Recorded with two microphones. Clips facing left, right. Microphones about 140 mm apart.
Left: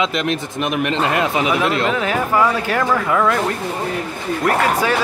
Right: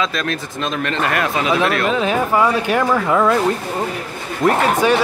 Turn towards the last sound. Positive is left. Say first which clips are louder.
# right 2 dB
turn(degrees=-20)  # may be behind; listen again after turning